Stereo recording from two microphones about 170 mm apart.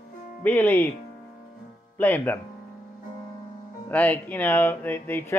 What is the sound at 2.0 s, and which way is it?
Speech, 10° left (ahead or behind).